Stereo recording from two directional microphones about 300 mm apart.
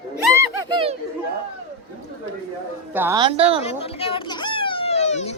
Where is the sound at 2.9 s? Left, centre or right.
Centre.